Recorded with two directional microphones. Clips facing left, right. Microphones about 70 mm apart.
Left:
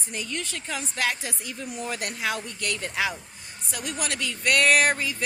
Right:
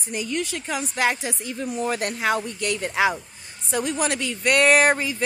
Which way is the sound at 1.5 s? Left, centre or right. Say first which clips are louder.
Right 8 dB; right.